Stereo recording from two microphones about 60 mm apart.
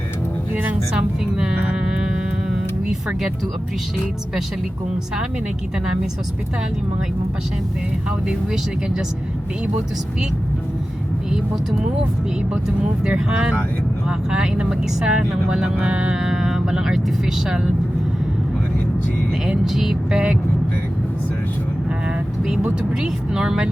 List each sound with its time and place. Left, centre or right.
0.5 s speech: right
1.4 s music: centre
11.3 s speech: centre
13.0 s speech: centre
19.3 s speech: centre
22.5 s speech: centre